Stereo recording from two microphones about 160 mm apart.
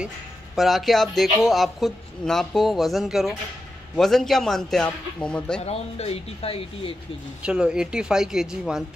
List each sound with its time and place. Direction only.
0.6 s speech: centre (ahead or behind)
5.6 s speech: 40° left (ahead or behind)
7.4 s speech: 5° right (ahead or behind)